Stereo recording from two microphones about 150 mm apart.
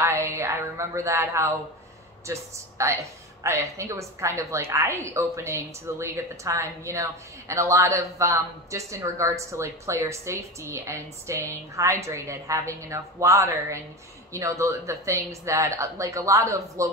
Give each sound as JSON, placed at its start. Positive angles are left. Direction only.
{"t": 0.0, "sound": "music", "side_deg": -20}
{"t": 2.2, "sound": "a woman's voice", "side_deg": -20}